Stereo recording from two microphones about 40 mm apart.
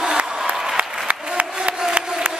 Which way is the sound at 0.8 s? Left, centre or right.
Right.